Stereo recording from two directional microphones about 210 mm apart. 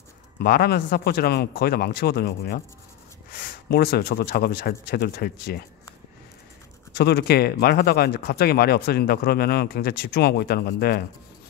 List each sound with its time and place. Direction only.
0.4 s speech: 45° left (ahead or behind)
3.7 s speech: 50° left (ahead or behind)
6.9 s speech: 50° left (ahead or behind)